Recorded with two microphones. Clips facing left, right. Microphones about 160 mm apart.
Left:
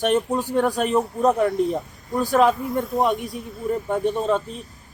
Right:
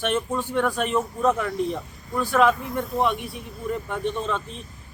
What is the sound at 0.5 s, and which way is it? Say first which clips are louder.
Speech: left 3 dB; 35° left (ahead or behind).